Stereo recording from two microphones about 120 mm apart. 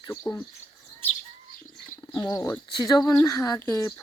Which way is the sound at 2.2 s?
30° left (ahead or behind).